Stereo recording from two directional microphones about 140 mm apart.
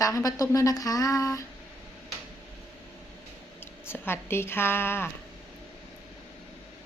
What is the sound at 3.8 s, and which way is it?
A woman's voice, 15° left (ahead or behind).